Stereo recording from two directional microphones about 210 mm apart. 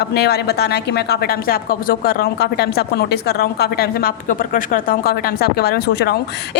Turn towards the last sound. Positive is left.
turn(degrees=50)  # may be behind; listen again after turning